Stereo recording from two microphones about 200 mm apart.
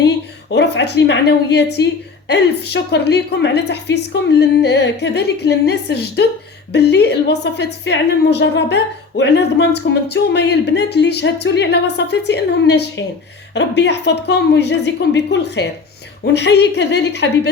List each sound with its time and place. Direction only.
0.5 s a woman's voice: 60° left (ahead or behind)